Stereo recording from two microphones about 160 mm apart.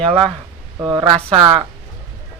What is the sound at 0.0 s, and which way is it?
Speech, 40° right (ahead or behind).